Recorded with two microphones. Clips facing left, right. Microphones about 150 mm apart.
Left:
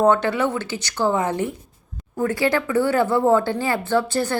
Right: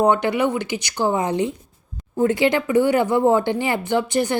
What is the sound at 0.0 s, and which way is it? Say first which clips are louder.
Speech: even; 15° right (ahead or behind).